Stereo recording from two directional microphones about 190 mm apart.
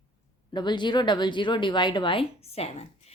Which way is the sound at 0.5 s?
25° left (ahead or behind).